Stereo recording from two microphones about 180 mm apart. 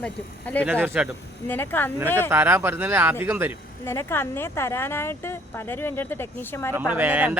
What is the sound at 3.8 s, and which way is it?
Speech, 15° left (ahead or behind).